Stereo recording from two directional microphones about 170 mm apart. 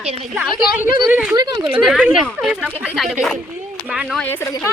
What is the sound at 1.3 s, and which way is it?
Speech, 25° right (ahead or behind).